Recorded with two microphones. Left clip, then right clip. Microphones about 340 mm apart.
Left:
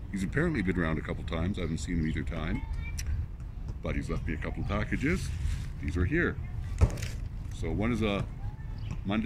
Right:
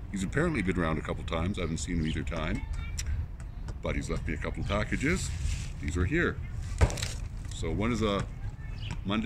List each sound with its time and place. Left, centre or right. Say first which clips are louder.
0.1 s speech: right 1 dB; centre
3.8 s speech: right 2 dB; centre
6.8 s a sound: right 4 dB; right
7.6 s speech: right 1 dB; centre